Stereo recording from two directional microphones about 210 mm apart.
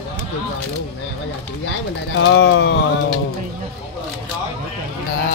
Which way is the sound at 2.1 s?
65° left (ahead or behind).